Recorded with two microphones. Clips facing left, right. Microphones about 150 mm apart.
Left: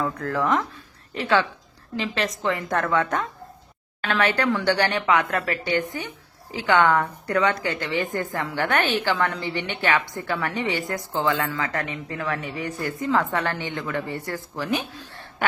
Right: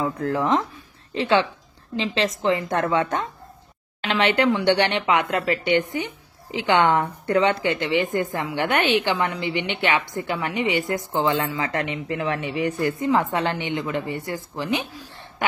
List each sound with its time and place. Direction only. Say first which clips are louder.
0.0 s speech: right 2 dB; 20° right (ahead or behind)